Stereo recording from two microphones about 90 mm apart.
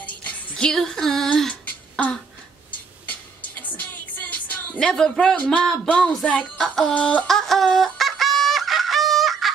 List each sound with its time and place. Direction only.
0.0 s music: 15° left (ahead or behind)
0.7 s female singing: 5° left (ahead or behind)
3.1 s music: 20° left (ahead or behind)
4.7 s music: 10° left (ahead or behind)
7.2 s fowl: 5° left (ahead or behind)